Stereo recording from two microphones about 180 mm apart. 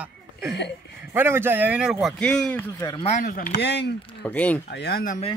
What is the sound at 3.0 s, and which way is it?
Speech, 40° left (ahead or behind).